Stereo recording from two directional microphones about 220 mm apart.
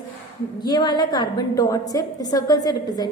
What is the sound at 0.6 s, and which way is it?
A woman's voice, 20° left (ahead or behind).